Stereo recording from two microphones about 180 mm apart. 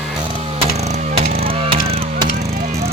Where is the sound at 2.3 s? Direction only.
45° right (ahead or behind).